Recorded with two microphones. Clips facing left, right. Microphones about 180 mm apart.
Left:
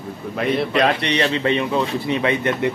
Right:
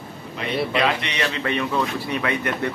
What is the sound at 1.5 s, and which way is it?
Speech, 20° left (ahead or behind).